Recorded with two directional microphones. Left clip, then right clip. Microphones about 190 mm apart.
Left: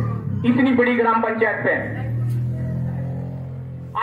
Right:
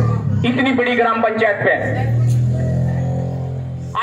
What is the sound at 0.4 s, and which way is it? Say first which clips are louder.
A man's voice: right 1 dB; 35° right (ahead or behind).